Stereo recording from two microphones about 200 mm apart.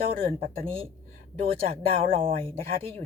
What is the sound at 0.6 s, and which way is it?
Speech, 30° right (ahead or behind).